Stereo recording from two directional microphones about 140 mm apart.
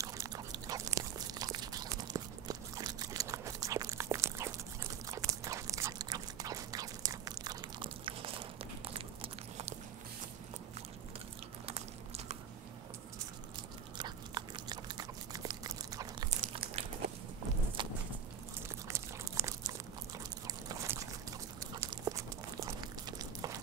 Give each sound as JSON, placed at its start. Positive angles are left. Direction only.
{"t": 0.0, "sound": "biting", "side_deg": -25}
{"t": 5.1, "sound": "a sound", "side_deg": -20}
{"t": 13.9, "sound": "biting", "side_deg": -30}
{"t": 16.3, "sound": "biting", "side_deg": -45}
{"t": 17.8, "sound": "walk", "side_deg": -35}
{"t": 18.9, "sound": "crunch", "side_deg": -20}
{"t": 20.6, "sound": "a sound", "side_deg": -20}